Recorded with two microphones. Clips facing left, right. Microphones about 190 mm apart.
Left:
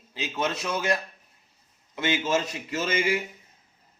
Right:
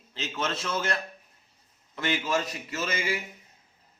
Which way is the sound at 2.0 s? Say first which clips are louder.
Left 3 dB; 20° left (ahead or behind).